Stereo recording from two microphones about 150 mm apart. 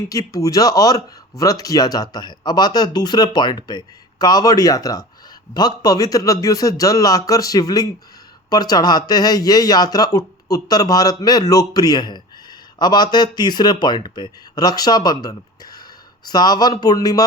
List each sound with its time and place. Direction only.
0.1 s speech: 25° left (ahead or behind)